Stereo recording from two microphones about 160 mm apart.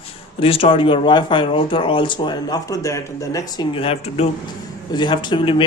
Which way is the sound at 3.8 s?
35° left (ahead or behind).